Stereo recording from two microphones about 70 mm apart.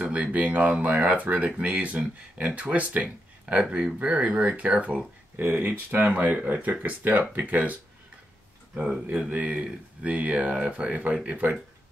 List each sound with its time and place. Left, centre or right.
0.1 s speech: centre
9.1 s speech: right